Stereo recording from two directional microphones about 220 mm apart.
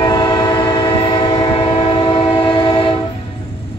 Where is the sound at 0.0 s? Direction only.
20° left (ahead or behind).